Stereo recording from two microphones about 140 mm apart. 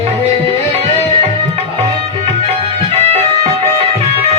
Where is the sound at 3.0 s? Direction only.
50° right (ahead or behind).